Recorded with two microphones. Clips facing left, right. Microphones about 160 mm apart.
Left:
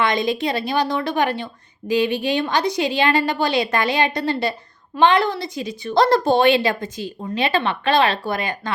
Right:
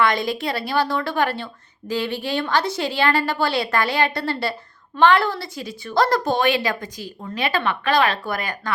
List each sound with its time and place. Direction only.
0.0 s a woman's voice: 20° left (ahead or behind)